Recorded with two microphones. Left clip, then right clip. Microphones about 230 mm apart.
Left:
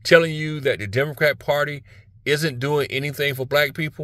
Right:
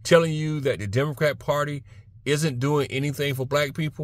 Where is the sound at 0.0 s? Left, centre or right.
Centre.